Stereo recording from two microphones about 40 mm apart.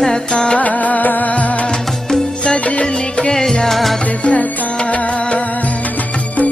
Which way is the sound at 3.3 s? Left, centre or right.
Centre.